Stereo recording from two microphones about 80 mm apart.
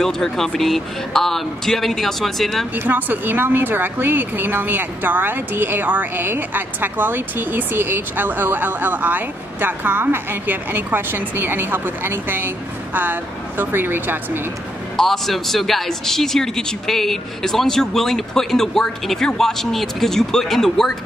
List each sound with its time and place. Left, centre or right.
0.0 s a man's voice: centre
2.7 s speech: right
15.0 s a man's voice: centre